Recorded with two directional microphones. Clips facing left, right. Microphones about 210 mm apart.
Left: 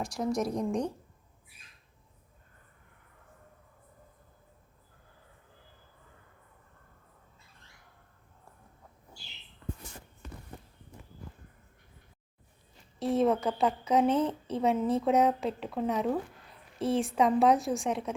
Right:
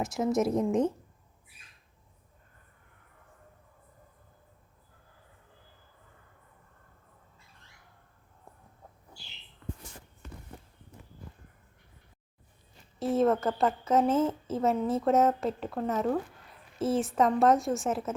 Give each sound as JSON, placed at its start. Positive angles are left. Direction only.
{"t": 0.3, "sound": "a woman's voice", "side_deg": -25}
{"t": 13.0, "sound": "a woman's voice", "side_deg": 0}